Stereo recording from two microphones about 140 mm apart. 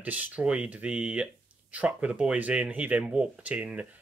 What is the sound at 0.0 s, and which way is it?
A man's voice, 10° right (ahead or behind).